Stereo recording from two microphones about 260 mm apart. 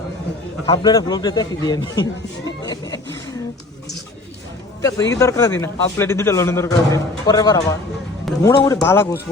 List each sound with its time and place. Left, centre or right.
0.6 s a man's voice: centre
2.6 s a sound: centre
4.8 s a man's voice: centre